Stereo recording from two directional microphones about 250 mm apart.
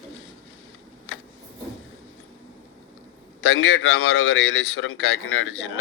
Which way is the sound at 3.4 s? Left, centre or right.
Left.